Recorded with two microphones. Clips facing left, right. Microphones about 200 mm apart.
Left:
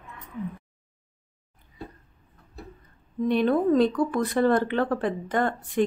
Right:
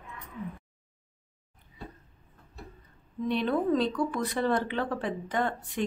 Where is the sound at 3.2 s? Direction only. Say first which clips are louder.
Left 5 dB; 50° left (ahead or behind).